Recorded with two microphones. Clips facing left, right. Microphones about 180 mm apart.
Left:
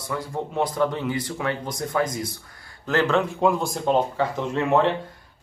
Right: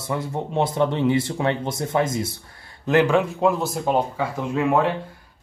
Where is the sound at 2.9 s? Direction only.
15° right (ahead or behind).